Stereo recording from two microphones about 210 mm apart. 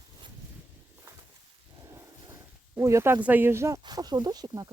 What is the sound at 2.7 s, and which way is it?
Speech, 15° right (ahead or behind).